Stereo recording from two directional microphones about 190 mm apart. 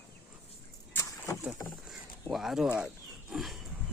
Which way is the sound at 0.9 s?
15° left (ahead or behind).